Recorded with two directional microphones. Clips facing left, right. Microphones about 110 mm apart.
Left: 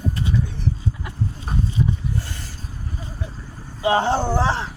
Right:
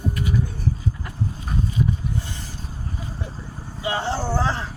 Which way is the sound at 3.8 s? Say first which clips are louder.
Left 7 dB; 50° left (ahead or behind).